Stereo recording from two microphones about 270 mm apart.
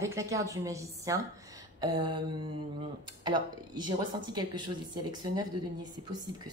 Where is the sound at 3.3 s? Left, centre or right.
Centre.